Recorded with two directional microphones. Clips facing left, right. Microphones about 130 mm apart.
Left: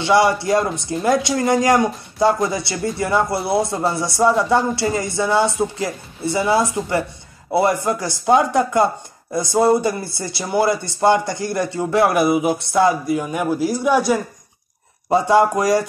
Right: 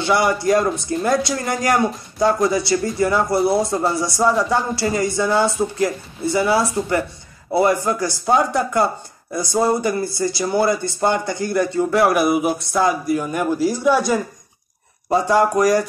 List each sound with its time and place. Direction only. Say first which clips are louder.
0.0 s speech: left 2 dB; 25° left (ahead or behind)